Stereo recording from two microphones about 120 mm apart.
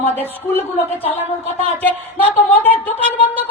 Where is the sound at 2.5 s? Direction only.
15° left (ahead or behind).